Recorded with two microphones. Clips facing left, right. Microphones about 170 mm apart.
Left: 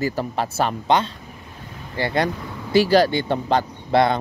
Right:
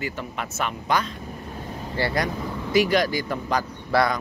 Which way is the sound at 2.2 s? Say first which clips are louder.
Left 2 dB; 30° left (ahead or behind).